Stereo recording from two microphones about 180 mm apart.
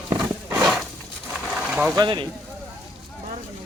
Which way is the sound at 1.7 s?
5° right (ahead or behind).